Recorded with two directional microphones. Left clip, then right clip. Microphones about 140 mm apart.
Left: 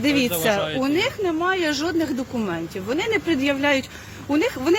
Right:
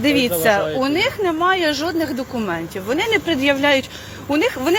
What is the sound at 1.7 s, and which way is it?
A woman's voice, 45° left (ahead or behind).